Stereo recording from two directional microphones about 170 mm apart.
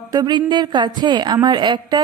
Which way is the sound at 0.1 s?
25° right (ahead or behind).